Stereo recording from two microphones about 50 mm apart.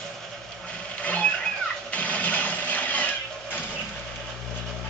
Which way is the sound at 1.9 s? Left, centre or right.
Left.